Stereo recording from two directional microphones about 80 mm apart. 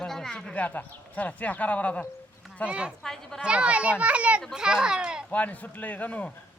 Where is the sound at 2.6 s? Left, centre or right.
Centre.